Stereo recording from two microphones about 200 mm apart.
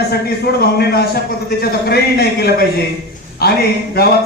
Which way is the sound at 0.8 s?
55° left (ahead or behind).